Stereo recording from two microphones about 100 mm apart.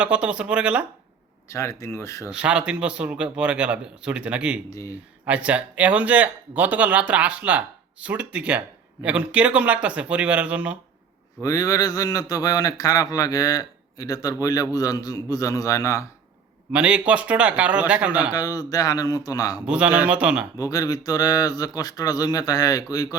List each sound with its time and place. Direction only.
0.0 s speech: 10° right (ahead or behind)
1.5 s speech: 30° left (ahead or behind)
2.3 s speech: 10° right (ahead or behind)
11.4 s speech: 35° left (ahead or behind)
16.7 s speech: 10° right (ahead or behind)
18.3 s speech: 40° left (ahead or behind)
19.6 s speech: 10° right (ahead or behind)
20.6 s speech: 35° left (ahead or behind)